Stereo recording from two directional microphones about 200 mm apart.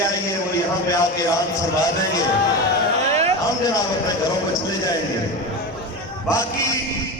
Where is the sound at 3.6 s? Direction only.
20° left (ahead or behind).